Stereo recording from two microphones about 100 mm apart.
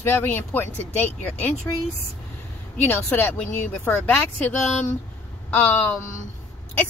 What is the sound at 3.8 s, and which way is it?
Speech, 20° left (ahead or behind).